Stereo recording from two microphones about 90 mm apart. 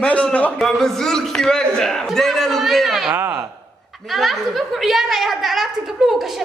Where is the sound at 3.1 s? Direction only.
30° right (ahead or behind).